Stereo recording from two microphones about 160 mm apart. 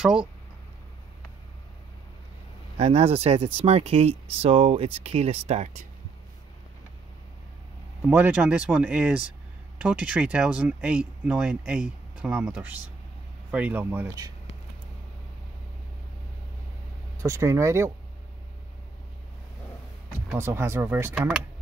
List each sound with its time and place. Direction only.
0.0 s speech: 5° right (ahead or behind)
2.8 s speech: 40° right (ahead or behind)
8.1 s speech: 10° right (ahead or behind)
17.2 s speech: 20° right (ahead or behind)
20.2 s speech: 15° right (ahead or behind)